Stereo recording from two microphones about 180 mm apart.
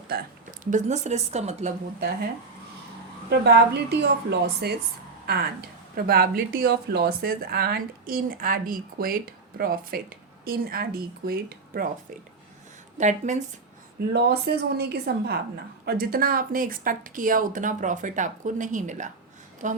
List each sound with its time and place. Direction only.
0.6 s a woman's voice: 40° right (ahead or behind)
2.0 s a woman's voice: 60° right (ahead or behind)
13.0 s a woman's voice: 40° right (ahead or behind)
14.1 s a woman's voice: 60° right (ahead or behind); by 19.8 s 45° right (ahead or behind)